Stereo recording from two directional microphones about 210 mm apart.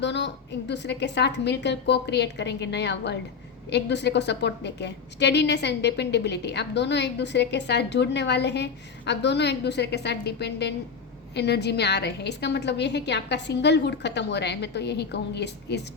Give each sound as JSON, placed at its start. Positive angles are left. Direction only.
{"t": 0.0, "sound": "a woman's voice", "side_deg": 55}